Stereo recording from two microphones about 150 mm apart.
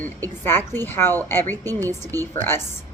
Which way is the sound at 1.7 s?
20° right (ahead or behind).